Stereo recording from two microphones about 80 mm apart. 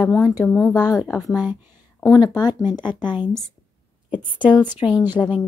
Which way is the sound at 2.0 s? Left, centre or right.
Left.